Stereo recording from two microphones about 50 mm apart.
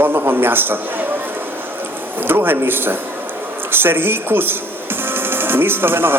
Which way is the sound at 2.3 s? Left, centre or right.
Right.